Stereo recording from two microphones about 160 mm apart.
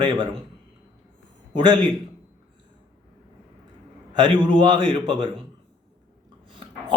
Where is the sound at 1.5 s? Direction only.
30° right (ahead or behind).